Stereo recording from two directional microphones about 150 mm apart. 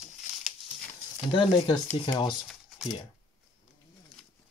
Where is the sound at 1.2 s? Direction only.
30° left (ahead or behind).